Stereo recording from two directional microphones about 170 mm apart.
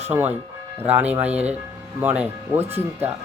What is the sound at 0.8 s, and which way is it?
Speech, 10° right (ahead or behind).